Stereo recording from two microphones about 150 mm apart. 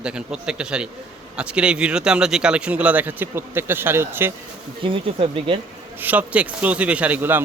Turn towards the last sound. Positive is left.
turn(degrees=-10)  # may be behind; listen again after turning